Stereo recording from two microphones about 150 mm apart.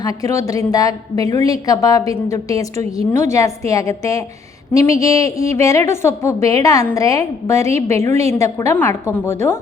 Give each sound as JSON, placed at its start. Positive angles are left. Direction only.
{"t": 0.0, "sound": "a woman's voice", "side_deg": 25}